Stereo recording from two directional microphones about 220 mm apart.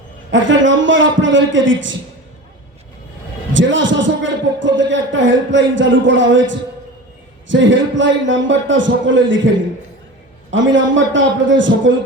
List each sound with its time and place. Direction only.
0.3 s a sound: 55° right (ahead or behind)
3.5 s a man's voice: 60° right (ahead or behind)
10.5 s a man's voice: 60° right (ahead or behind)